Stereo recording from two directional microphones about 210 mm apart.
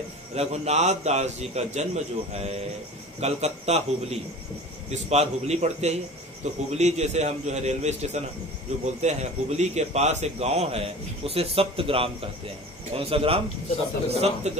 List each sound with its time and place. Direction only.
0.3 s a man's voice: 30° right (ahead or behind)